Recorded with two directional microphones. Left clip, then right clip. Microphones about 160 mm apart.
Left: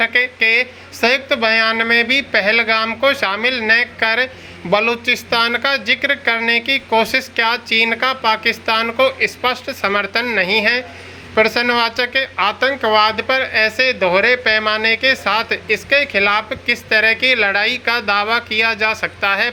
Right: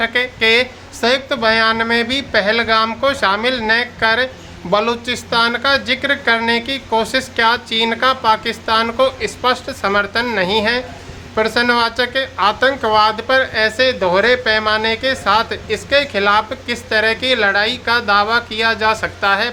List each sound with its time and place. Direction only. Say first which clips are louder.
0.0 s speech: left 1 dB; 5° left (ahead or behind)